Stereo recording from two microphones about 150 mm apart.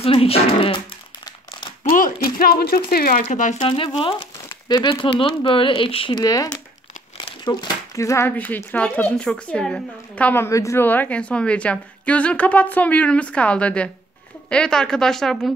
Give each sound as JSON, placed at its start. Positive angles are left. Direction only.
{"t": 0.0, "sound": "speech", "side_deg": 40}
{"t": 1.8, "sound": "speech", "side_deg": 65}
{"t": 3.2, "sound": "speech", "side_deg": 55}
{"t": 3.6, "sound": "a woman's voice", "side_deg": 35}